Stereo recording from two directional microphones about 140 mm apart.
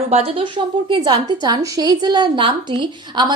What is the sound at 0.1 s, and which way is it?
A woman's voice, 45° right (ahead or behind).